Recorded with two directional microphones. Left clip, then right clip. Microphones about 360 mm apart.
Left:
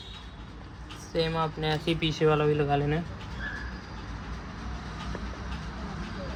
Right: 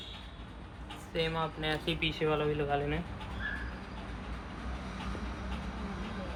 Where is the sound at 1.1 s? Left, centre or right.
Left.